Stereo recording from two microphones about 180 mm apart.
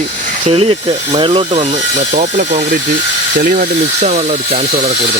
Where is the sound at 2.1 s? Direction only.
45° right (ahead or behind).